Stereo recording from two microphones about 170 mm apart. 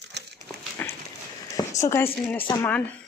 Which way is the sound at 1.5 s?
20° left (ahead or behind).